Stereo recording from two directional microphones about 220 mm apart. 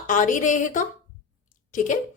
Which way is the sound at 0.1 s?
35° left (ahead or behind).